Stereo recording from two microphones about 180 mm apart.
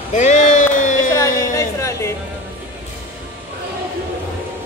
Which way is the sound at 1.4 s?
15° left (ahead or behind).